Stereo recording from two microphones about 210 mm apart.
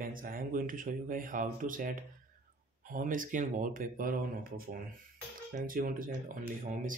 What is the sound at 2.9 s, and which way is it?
Speech, 40° right (ahead or behind).